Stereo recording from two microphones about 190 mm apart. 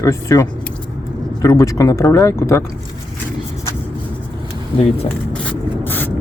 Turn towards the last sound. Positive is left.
turn(degrees=10)  # may be behind; listen again after turning